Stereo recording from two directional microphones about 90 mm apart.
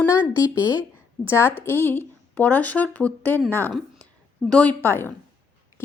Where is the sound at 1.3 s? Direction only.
25° left (ahead or behind).